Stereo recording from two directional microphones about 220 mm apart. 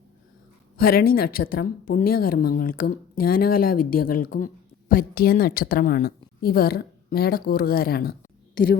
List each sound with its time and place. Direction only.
0.8 s speech: 45° left (ahead or behind)